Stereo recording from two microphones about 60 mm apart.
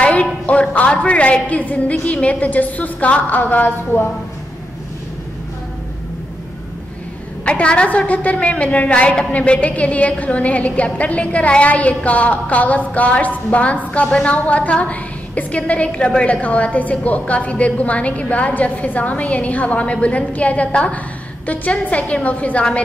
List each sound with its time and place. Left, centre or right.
0.0 s a woman's voice: left
7.4 s a woman's voice: centre